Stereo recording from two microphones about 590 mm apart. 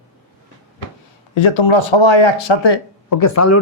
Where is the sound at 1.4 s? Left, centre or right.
Left.